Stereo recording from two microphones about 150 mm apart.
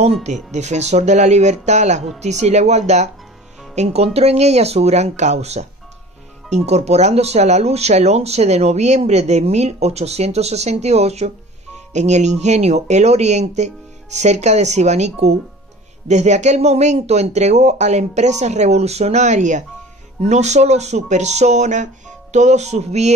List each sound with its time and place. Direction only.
0.2 s speech: 50° right (ahead or behind)